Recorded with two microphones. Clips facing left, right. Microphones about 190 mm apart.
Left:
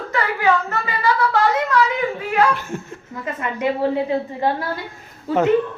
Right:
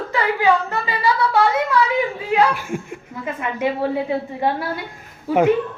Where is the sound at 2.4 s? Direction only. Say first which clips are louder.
Even; 10° right (ahead or behind).